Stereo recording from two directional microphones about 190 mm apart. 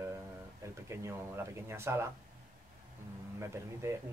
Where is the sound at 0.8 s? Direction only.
15° right (ahead or behind).